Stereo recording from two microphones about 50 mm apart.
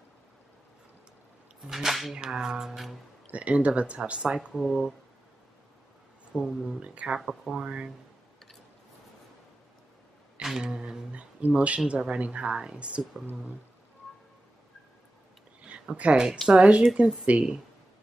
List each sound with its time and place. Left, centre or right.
1.6 s speech: centre
2.1 s music: centre
3.3 s speech: right
4.6 s music: centre
6.3 s music: centre
6.8 s speech: right
7.2 s music: centre
7.6 s speech: right
10.4 s music: centre
11.1 s speech: right
16.0 s speech: centre